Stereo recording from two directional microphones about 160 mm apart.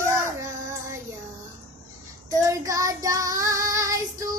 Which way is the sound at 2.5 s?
20° right (ahead or behind).